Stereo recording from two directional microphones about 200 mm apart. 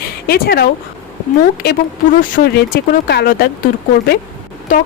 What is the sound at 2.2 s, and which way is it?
Speech, 40° left (ahead or behind).